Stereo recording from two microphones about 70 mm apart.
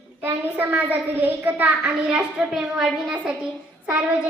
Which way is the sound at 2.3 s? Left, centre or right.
Centre.